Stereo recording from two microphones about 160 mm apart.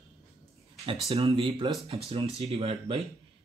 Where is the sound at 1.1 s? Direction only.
35° right (ahead or behind).